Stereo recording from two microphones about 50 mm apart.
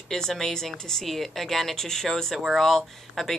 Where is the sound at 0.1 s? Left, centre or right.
Centre.